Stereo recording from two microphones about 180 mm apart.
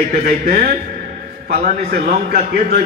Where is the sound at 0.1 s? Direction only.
55° right (ahead or behind).